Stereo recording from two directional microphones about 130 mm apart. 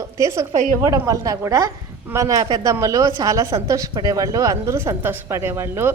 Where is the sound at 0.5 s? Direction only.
75° right (ahead or behind).